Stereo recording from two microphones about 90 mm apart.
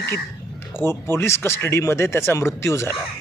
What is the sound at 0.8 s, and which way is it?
A man's voice, 25° left (ahead or behind).